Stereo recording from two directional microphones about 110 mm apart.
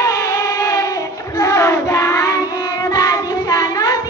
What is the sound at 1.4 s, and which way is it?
Child singing, 25° left (ahead or behind).